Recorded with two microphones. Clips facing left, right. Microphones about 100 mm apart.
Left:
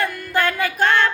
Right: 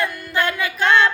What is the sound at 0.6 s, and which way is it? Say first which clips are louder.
Music: right 3 dB; 45° left (ahead or behind).